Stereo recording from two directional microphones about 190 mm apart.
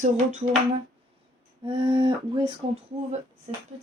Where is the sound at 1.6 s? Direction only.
25° right (ahead or behind).